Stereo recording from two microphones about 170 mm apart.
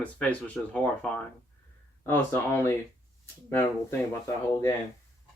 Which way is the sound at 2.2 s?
15° left (ahead or behind).